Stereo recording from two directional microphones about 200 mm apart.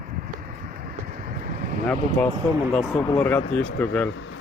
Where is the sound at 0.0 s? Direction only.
45° right (ahead or behind).